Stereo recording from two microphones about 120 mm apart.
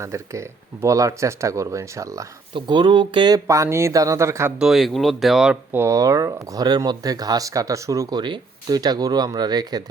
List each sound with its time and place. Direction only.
0.0 s speech: 25° right (ahead or behind)
2.6 s speech: 40° right (ahead or behind)
3.4 s speech: 25° right (ahead or behind)
4.6 s speech: centre (ahead or behind)
5.7 s speech: 25° right (ahead or behind)
8.2 s speech: 40° right (ahead or behind)